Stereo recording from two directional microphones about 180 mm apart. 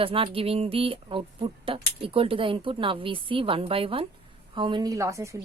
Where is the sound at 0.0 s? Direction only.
30° right (ahead or behind).